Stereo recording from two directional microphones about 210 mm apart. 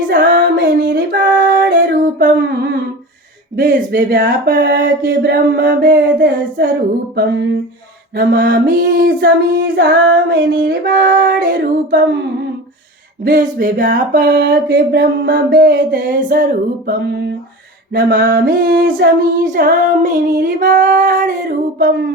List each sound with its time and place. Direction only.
0.1 s music: 50° right (ahead or behind)
0.9 s female singing: 45° right (ahead or behind)
3.5 s music: 40° right (ahead or behind)
5.0 s female singing: 50° right (ahead or behind)
8.1 s music: 45° right (ahead or behind)
9.2 s female singing: 45° right (ahead or behind)
13.2 s music: 40° right (ahead or behind)
13.9 s female singing: 40° right (ahead or behind)
20.2 s female singing: 55° right (ahead or behind)
21.0 s music: 35° right (ahead or behind)